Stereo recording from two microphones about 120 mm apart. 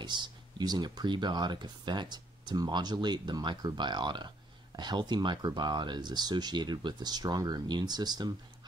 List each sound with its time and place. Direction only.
0.0 s speech: 40° right (ahead or behind)